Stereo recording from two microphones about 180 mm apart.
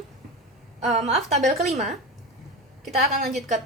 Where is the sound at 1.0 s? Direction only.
40° right (ahead or behind).